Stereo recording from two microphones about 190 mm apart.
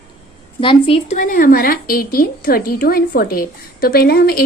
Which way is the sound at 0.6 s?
30° left (ahead or behind).